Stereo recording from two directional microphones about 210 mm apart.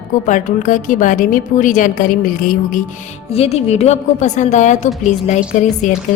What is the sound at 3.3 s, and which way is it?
A woman's voice, 30° left (ahead or behind).